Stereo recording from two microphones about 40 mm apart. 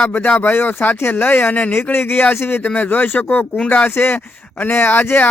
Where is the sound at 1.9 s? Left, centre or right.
Left.